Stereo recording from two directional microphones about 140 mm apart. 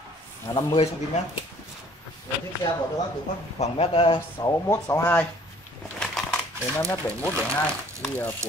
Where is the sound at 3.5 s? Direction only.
50° left (ahead or behind).